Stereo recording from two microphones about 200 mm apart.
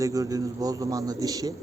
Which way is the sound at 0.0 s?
15° right (ahead or behind).